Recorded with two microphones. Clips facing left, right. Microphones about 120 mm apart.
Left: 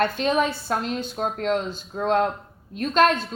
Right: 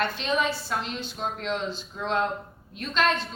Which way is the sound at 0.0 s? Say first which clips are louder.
Left 5 dB; 50° left (ahead or behind).